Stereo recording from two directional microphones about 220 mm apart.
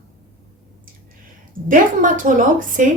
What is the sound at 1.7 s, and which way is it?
A woman's voice, 35° right (ahead or behind).